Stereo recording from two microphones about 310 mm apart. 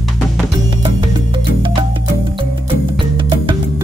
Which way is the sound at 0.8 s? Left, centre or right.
Centre.